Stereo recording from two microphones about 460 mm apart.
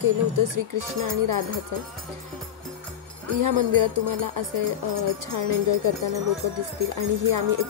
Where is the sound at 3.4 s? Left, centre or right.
Right.